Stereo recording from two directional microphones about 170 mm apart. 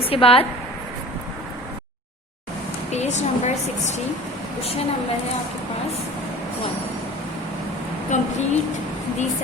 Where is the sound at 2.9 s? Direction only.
40° left (ahead or behind).